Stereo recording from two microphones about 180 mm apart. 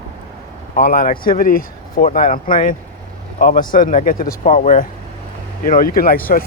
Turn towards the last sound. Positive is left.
turn(degrees=55)  # may be behind; listen again after turning